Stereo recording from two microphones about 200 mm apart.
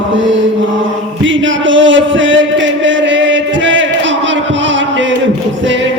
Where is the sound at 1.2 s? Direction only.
70° right (ahead or behind).